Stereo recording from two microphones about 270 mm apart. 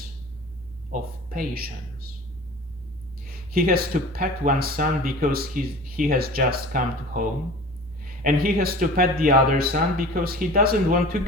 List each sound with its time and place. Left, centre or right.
0.9 s speech: right
3.2 s speech: right
8.2 s speech: right